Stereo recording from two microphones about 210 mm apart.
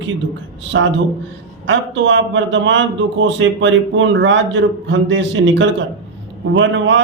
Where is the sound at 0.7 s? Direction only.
65° right (ahead or behind).